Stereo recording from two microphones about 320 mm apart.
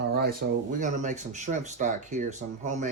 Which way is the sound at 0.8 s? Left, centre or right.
Right.